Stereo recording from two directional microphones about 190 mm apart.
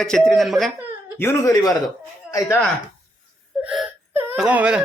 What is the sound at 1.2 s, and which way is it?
Speech, 15° left (ahead or behind).